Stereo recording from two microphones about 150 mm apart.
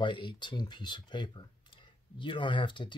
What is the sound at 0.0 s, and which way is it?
Speech, 35° left (ahead or behind).